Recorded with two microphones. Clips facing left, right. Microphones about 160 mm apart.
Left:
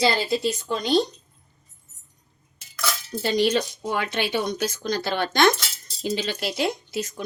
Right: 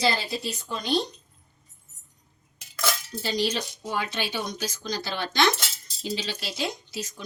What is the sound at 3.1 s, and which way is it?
Speech, 55° left (ahead or behind).